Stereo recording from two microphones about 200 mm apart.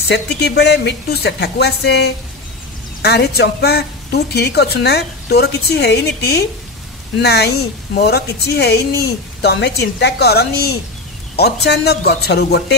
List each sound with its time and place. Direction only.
0.1 s a woman's voice: 55° left (ahead or behind)